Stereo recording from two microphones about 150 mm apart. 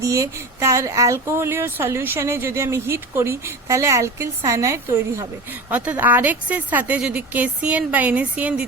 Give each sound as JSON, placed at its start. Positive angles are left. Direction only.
{"t": 0.0, "sound": "speech", "side_deg": -20}